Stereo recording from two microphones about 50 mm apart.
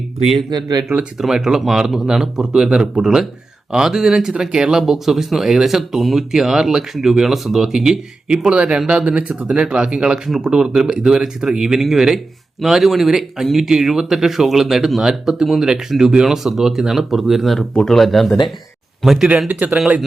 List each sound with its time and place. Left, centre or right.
1.2 s speech: centre
4.8 s speech: centre
19.5 s speech: right